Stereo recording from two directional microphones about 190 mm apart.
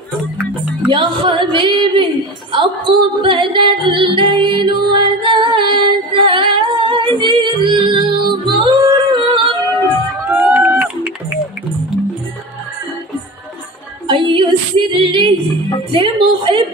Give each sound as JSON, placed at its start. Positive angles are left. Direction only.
{"t": 0.8, "sound": "music", "side_deg": -25}
{"t": 10.3, "sound": "a sound", "side_deg": -10}
{"t": 14.0, "sound": "music", "side_deg": -25}